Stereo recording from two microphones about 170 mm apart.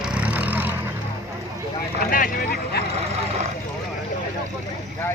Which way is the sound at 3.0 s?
40° right (ahead or behind).